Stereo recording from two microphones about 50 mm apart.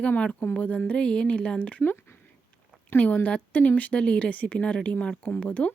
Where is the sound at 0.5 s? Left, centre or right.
Left.